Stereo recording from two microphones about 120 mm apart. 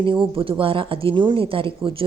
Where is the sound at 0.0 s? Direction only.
45° right (ahead or behind).